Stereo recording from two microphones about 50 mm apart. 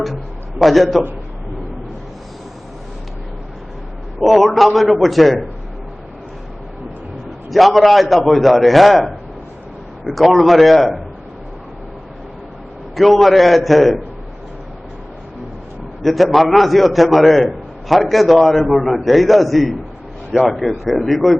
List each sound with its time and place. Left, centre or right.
0.0 s a man's voice: centre
4.2 s a man's voice: centre
7.5 s a man's voice: centre
13.0 s a man's voice: centre
16.0 s a man's voice: centre